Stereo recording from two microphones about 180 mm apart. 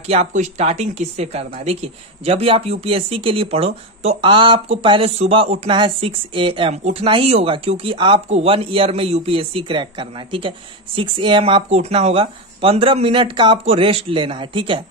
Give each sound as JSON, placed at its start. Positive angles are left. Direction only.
{"t": 0.0, "sound": "speech", "side_deg": -35}